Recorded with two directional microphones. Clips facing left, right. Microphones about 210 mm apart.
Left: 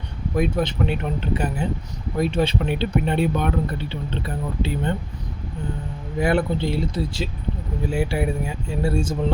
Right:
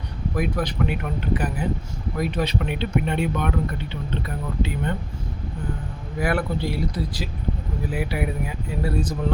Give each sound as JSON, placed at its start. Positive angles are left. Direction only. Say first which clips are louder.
{"t": 0.3, "sound": "speech", "louder": "left 3 dB", "side_deg": 25}
{"t": 6.1, "sound": "speech", "louder": "left 3 dB", "side_deg": 25}